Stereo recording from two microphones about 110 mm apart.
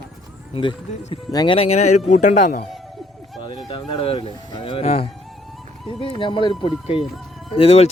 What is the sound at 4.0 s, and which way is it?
Speech, 60° left (ahead or behind).